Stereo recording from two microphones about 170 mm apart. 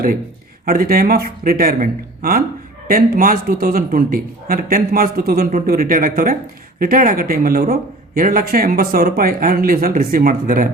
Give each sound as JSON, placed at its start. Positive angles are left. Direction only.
{"t": 0.6, "sound": "speech", "side_deg": -60}